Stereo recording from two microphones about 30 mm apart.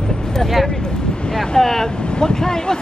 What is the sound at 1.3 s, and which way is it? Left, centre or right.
Speech, centre.